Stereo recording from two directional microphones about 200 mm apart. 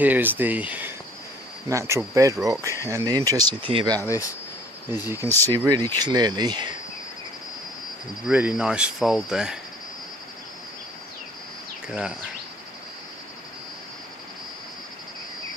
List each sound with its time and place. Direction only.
0.0 s speech: 10° right (ahead or behind)
4.0 s speech: 15° left (ahead or behind)
5.0 s speech: 10° right (ahead or behind)
8.3 s speech: 5° right (ahead or behind)